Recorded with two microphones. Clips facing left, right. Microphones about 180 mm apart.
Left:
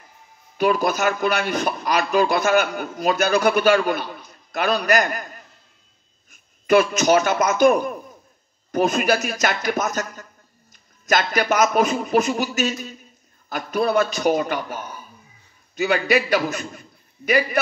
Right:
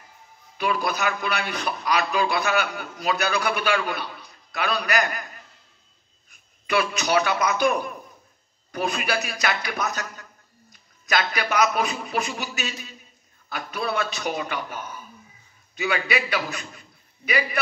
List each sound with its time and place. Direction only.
0.6 s a man's voice: 45° left (ahead or behind)
6.7 s a man's voice: 45° left (ahead or behind)